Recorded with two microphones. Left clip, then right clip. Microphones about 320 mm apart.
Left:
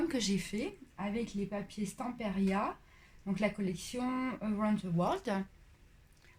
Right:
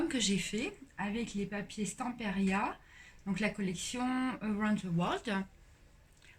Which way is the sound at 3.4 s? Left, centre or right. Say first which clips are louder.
Left 1 dB; centre.